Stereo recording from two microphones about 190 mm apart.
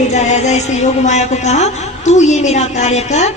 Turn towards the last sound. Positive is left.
turn(degrees=35)  # may be behind; listen again after turning